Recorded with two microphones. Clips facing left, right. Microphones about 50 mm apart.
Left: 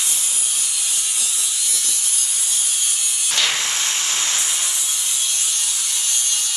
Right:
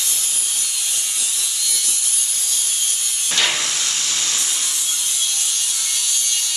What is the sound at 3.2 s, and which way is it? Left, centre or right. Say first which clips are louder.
Wood: right 1 dB; right.